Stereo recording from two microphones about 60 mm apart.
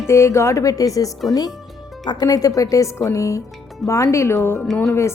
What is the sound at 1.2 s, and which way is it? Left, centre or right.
A woman's voice, left.